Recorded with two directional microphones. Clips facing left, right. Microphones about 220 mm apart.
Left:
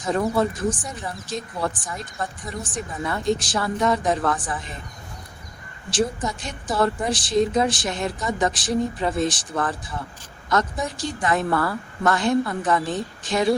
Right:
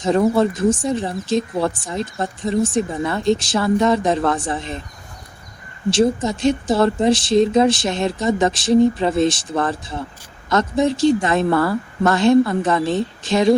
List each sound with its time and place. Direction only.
0.0 s speech: 25° right (ahead or behind)
5.9 s speech: 25° right (ahead or behind)